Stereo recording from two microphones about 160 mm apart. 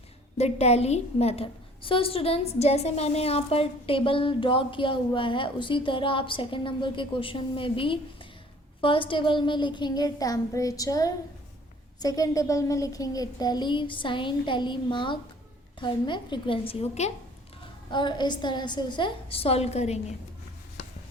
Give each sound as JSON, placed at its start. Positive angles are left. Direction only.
{"t": 0.3, "sound": "a woman's voice", "side_deg": 40}
{"t": 17.9, "sound": "a woman's voice", "side_deg": 30}